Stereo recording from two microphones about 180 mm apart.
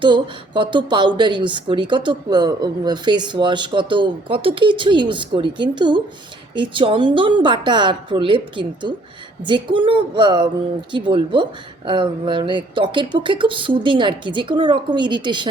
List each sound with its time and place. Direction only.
0.0 s speech: 25° right (ahead or behind)